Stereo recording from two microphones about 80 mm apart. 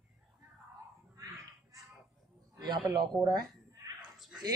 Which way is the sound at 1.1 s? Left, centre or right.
Right.